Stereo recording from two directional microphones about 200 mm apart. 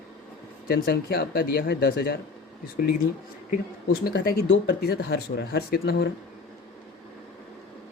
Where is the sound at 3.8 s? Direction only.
50° left (ahead or behind).